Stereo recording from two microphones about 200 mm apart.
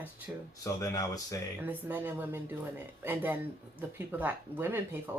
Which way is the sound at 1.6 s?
10° right (ahead or behind).